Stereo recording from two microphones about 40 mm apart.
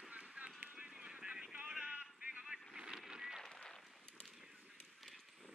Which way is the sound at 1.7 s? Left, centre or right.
Centre.